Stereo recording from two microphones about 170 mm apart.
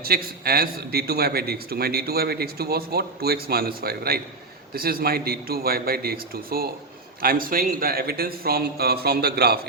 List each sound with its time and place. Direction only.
0.0 s speech: 65° right (ahead or behind)